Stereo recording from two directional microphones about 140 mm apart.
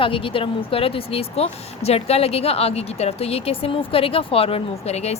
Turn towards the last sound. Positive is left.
turn(degrees=45)  # may be behind; listen again after turning